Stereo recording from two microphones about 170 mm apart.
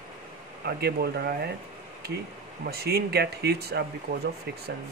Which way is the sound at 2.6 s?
65° right (ahead or behind).